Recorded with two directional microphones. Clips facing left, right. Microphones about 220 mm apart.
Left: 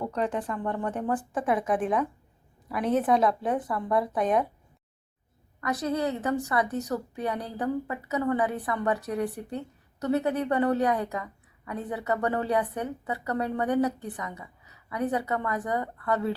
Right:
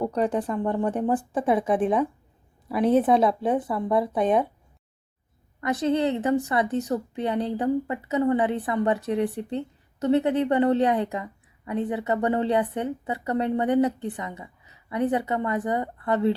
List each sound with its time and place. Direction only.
0.0 s a woman's voice: 35° right (ahead or behind)
5.5 s a woman's voice: 25° right (ahead or behind)